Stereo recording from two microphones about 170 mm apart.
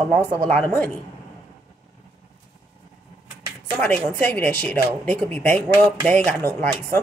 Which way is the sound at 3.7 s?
10° left (ahead or behind).